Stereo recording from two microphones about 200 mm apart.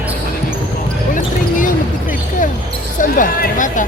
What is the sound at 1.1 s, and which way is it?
Basketball bounce, 40° left (ahead or behind).